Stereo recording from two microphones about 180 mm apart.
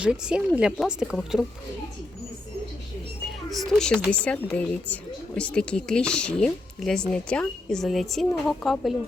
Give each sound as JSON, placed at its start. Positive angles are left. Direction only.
{"t": 0.0, "sound": "speech", "side_deg": -5}
{"t": 3.5, "sound": "speech", "side_deg": 0}